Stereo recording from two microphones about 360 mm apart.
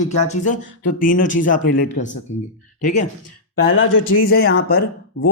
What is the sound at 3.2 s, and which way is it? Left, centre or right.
Speech, left.